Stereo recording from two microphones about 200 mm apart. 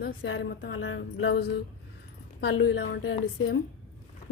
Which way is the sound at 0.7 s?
80° left.